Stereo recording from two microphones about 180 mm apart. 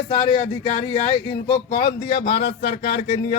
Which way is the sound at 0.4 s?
40° left (ahead or behind).